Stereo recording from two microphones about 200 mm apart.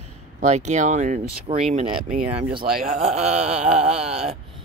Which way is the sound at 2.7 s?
40° right (ahead or behind).